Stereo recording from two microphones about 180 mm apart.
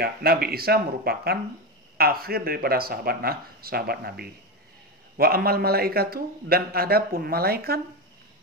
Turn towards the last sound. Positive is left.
turn(degrees=-60)  # may be behind; listen again after turning